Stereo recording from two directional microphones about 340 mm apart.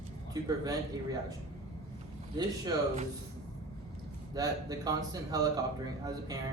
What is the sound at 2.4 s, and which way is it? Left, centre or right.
Speech, centre.